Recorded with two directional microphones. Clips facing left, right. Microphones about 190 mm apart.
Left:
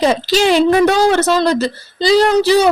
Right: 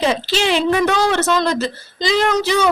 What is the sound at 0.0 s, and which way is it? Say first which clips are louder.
Speech: left 5 dB; 40° left (ahead or behind).